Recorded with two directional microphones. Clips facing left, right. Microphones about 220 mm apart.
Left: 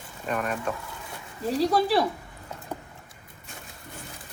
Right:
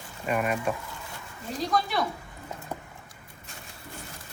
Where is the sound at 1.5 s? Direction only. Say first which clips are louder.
Left 5 dB; 35° left (ahead or behind).